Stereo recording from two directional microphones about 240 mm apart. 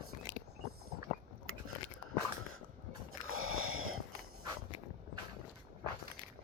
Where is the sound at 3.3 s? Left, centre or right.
Right.